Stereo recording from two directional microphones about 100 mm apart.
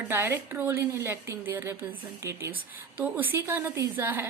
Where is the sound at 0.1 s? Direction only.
20° right (ahead or behind).